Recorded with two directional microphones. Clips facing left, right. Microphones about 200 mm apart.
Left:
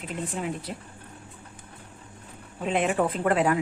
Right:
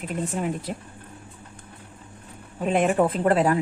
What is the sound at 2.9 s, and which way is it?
Speech, 30° right (ahead or behind).